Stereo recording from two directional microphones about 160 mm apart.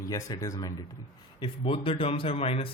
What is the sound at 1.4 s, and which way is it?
Speech, 35° left (ahead or behind).